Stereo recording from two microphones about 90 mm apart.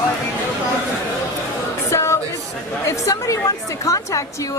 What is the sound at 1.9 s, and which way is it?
Music, 30° left (ahead or behind).